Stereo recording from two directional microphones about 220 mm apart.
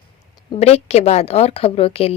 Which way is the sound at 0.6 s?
30° left (ahead or behind).